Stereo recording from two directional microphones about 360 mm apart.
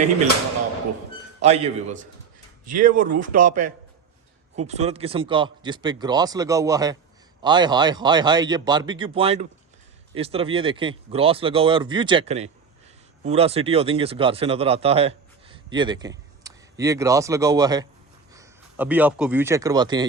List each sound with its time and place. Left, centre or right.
1.4 s a man's voice: centre